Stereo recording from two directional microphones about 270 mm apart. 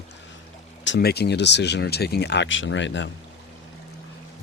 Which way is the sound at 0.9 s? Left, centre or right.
Left.